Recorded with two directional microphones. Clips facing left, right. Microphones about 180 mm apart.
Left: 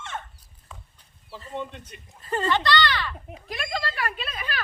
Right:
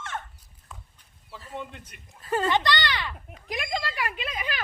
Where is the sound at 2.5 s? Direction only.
20° right (ahead or behind).